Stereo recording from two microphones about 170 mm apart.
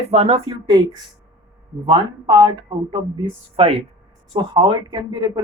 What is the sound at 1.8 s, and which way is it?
Speech, 25° right (ahead or behind).